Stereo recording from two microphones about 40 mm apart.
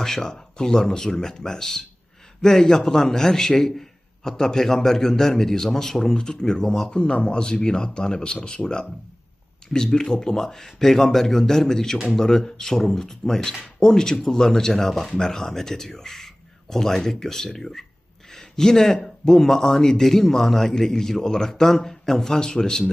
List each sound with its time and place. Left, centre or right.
0.0 s a man's voice: centre
7.0 s a man's voice: left